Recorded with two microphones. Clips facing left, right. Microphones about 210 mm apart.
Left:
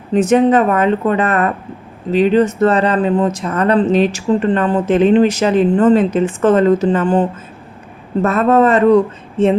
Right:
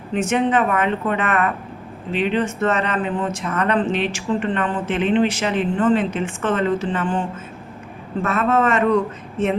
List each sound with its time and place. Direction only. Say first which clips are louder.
0.1 s speech: left 8 dB; 40° left (ahead or behind)